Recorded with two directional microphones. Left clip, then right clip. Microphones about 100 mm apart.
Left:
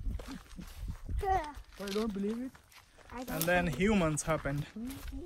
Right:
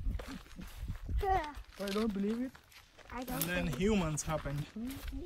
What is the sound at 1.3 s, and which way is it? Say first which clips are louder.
Speech: left 1 dB; 15° left (ahead or behind).